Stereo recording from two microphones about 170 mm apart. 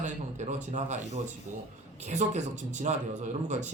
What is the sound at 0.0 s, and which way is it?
A man's voice, 45° right (ahead or behind).